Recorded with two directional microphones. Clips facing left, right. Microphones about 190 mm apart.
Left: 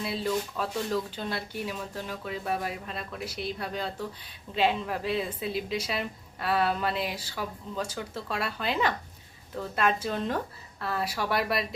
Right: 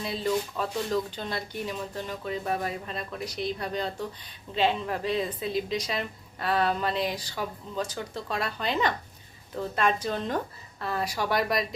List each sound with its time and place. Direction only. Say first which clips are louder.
0.0 s a woman's voice: right 1 dB; 5° left (ahead or behind)